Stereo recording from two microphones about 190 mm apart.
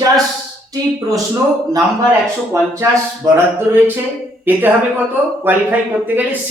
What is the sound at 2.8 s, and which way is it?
A man's voice, 10° right (ahead or behind).